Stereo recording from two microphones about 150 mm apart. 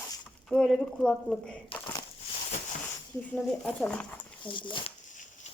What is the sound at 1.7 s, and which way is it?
Speech, 35° left (ahead or behind).